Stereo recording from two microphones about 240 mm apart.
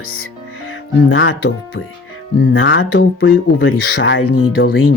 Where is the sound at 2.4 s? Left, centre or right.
Left.